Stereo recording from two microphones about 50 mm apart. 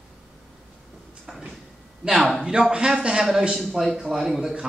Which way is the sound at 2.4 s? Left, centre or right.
Centre.